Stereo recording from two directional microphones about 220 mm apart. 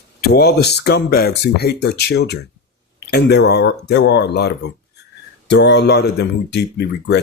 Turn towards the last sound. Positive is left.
turn(degrees=50)  # may be behind; listen again after turning